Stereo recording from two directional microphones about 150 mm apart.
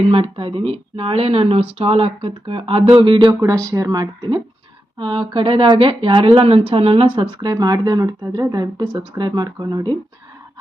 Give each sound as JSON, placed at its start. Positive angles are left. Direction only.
{"t": 0.1, "sound": "speech", "side_deg": -40}
{"t": 3.5, "sound": "speech", "side_deg": -20}